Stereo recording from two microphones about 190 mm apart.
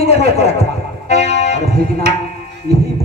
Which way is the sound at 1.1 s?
35° left (ahead or behind).